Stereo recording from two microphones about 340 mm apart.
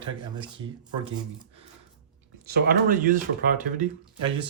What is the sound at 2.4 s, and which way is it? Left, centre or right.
Speech, right.